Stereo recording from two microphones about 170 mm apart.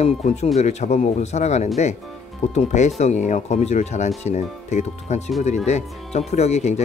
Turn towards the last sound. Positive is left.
turn(degrees=40)  # may be behind; listen again after turning